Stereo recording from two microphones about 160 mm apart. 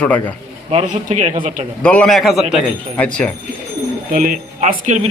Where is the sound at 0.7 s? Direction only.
50° right (ahead or behind).